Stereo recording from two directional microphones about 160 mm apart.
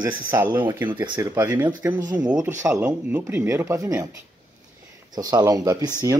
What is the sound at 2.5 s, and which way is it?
Speech, 20° right (ahead or behind).